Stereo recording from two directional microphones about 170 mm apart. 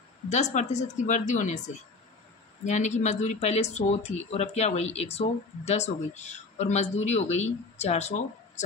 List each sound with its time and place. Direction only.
0.3 s speech: 45° left (ahead or behind)